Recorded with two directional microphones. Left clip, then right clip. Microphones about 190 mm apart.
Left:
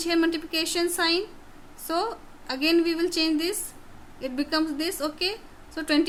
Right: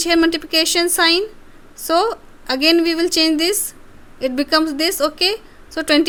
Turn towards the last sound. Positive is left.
turn(degrees=-40)  # may be behind; listen again after turning